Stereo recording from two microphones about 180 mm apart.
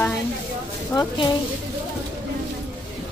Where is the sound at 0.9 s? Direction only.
25° left (ahead or behind).